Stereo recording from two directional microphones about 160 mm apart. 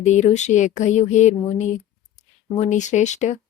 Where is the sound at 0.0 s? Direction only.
45° left (ahead or behind).